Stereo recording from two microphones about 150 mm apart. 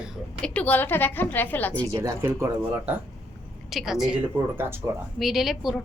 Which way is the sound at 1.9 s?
20° right (ahead or behind).